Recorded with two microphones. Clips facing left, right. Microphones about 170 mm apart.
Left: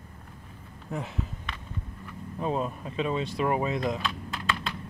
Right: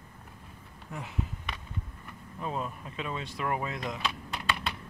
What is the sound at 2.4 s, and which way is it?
Speech, 25° left (ahead or behind).